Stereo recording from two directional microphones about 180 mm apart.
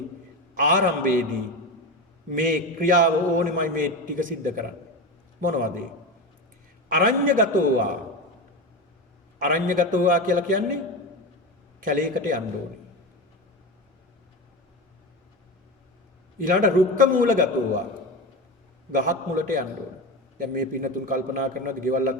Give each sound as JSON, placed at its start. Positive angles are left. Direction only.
{"t": 0.5, "sound": "a man's voice", "side_deg": -45}
{"t": 2.3, "sound": "a man's voice", "side_deg": -50}
{"t": 6.8, "sound": "a man's voice", "side_deg": -50}
{"t": 9.4, "sound": "a man's voice", "side_deg": -50}
{"t": 11.8, "sound": "a man's voice", "side_deg": -50}
{"t": 16.4, "sound": "a man's voice", "side_deg": -50}
{"t": 18.9, "sound": "a man's voice", "side_deg": -50}